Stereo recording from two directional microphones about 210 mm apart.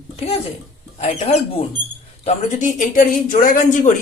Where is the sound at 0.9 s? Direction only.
30° left (ahead or behind).